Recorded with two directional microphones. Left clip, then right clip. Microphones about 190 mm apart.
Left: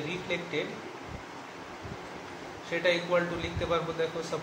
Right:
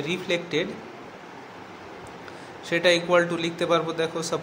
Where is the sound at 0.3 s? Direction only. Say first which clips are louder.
Right 7 dB; 60° right (ahead or behind).